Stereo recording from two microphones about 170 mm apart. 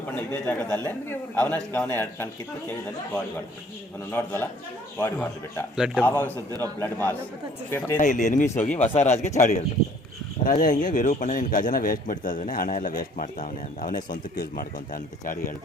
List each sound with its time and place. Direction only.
0.1 s speech: 10° left (ahead or behind)
4.1 s speech: 15° left (ahead or behind)
5.7 s a man's voice: 5° right (ahead or behind)
6.0 s speech: 10° left (ahead or behind)
7.9 s a man's voice: 45° left (ahead or behind)
9.0 s speech: 15° left (ahead or behind)
9.4 s a man's voice: 45° left (ahead or behind)